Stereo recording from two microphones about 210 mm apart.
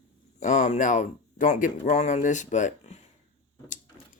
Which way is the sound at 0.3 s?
35° left (ahead or behind).